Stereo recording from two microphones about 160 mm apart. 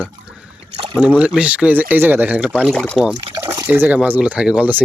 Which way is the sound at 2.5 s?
5° left (ahead or behind).